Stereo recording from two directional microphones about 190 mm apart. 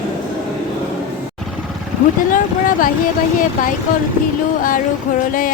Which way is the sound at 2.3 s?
45° left (ahead or behind).